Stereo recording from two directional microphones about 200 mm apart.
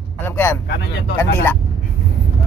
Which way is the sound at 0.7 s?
60° left (ahead or behind).